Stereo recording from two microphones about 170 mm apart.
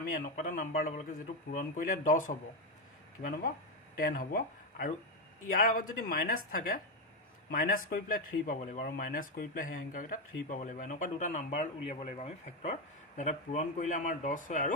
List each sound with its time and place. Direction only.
0.1 s speech: 50° left (ahead or behind)
3.9 s speech: 55° left (ahead or behind)